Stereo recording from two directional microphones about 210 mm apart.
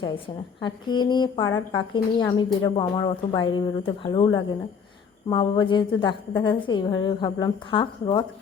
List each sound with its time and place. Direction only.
0.6 s speech: 20° left (ahead or behind)